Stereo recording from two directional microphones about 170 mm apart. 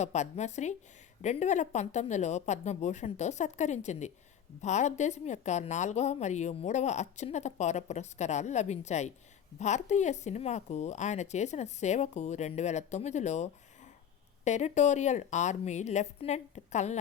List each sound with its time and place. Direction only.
0.0 s a woman's voice: 40° left (ahead or behind)